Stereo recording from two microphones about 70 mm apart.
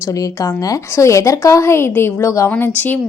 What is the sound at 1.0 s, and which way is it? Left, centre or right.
A woman's voice, left.